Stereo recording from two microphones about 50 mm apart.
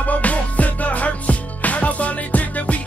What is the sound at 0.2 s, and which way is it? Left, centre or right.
Music, left.